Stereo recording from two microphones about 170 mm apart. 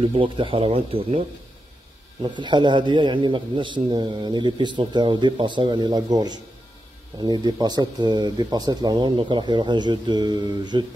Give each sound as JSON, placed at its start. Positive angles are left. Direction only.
{"t": 0.0, "sound": "speech", "side_deg": -30}
{"t": 2.2, "sound": "a man's voice", "side_deg": -25}